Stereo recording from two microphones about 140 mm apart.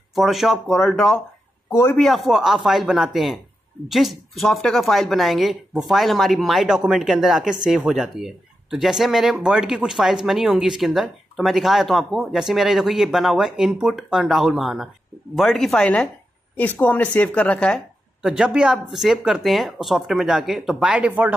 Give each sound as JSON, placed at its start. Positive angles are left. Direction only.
{"t": 0.1, "sound": "speech", "side_deg": 0}
{"t": 1.7, "sound": "a man's voice", "side_deg": 20}
{"t": 2.0, "sound": "speech", "side_deg": 0}
{"t": 18.2, "sound": "speech", "side_deg": -5}